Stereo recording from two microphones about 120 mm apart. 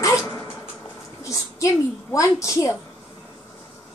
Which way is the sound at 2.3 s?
25° left (ahead or behind).